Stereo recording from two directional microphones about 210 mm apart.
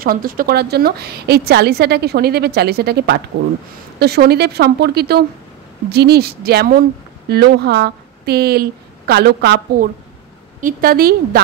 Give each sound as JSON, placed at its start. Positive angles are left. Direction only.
{"t": 0.0, "sound": "a woman's voice", "side_deg": -45}